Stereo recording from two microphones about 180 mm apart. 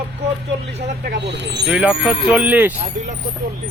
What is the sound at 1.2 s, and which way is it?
Speech, 75° right (ahead or behind).